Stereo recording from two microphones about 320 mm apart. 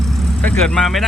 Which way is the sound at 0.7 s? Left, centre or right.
Centre.